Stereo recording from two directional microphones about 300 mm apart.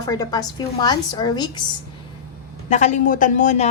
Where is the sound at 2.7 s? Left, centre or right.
Left.